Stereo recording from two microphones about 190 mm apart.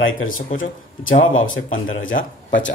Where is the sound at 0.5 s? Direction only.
45° left (ahead or behind).